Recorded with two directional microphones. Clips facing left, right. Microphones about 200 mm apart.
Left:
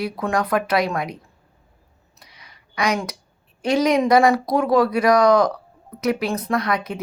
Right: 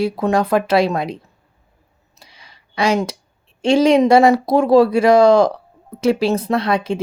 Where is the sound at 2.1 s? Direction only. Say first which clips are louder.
Right 2 dB; 30° right (ahead or behind).